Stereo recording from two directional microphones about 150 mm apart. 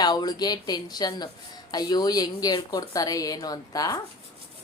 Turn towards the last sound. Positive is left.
turn(degrees=25)  # may be behind; listen again after turning